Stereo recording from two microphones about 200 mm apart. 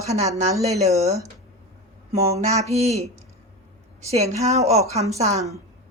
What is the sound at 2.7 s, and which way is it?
A woman's voice, 35° right (ahead or behind).